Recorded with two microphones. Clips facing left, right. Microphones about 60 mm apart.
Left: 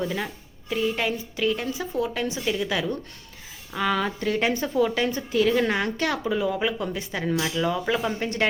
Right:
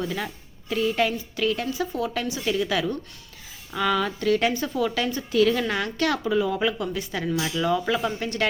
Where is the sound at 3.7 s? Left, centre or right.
Left.